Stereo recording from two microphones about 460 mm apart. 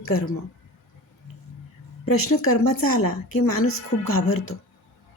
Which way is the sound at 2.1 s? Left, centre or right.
Left.